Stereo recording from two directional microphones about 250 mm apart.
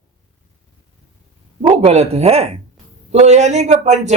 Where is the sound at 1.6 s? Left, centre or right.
Right.